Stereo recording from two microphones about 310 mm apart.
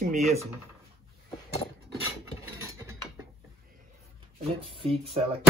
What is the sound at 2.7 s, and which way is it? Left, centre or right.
Cutlery, centre.